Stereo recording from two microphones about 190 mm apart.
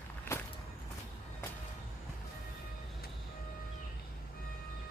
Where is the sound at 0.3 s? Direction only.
10° left (ahead or behind).